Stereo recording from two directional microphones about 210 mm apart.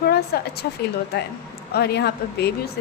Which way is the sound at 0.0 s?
50° left (ahead or behind).